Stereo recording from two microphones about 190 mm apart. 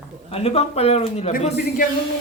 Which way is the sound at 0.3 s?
30° left (ahead or behind).